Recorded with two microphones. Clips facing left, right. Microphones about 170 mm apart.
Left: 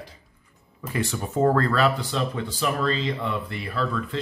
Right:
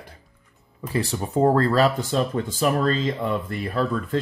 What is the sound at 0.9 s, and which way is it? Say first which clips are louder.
Speech: right 3 dB; 35° right (ahead or behind).